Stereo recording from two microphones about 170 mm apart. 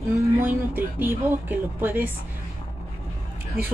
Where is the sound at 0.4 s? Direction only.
10° right (ahead or behind).